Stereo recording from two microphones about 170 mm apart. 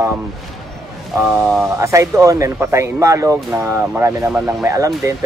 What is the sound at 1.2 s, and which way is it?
Speech, 5° right (ahead or behind).